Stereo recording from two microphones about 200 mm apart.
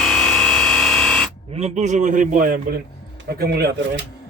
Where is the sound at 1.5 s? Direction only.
35° right (ahead or behind); by 3.7 s 55° right (ahead or behind).